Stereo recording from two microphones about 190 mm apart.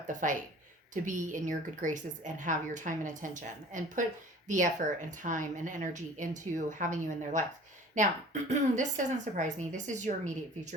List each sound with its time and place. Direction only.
0.1 s a woman's voice: 40° right (ahead or behind)